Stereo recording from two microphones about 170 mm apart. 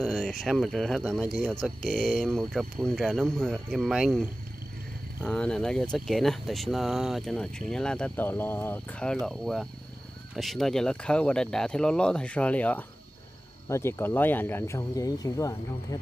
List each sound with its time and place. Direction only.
0.0 s speech: 5° left (ahead or behind); by 16.0 s 20° left (ahead or behind)